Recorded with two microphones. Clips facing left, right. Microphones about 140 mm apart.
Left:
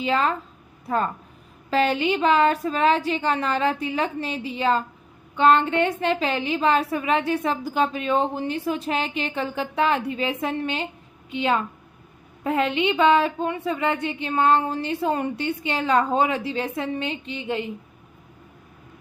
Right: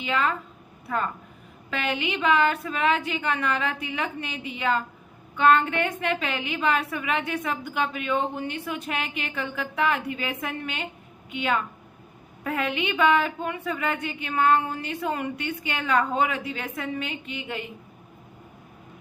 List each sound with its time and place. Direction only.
0.0 s a woman's voice: 30° left (ahead or behind)